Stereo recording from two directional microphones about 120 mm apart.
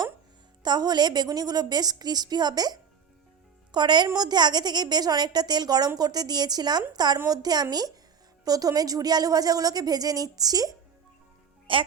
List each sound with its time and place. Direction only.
0.6 s speech: 35° right (ahead or behind)
11.7 s a woman's voice: 45° right (ahead or behind)